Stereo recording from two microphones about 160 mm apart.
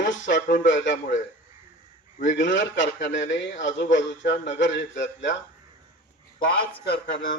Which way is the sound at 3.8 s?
90° left.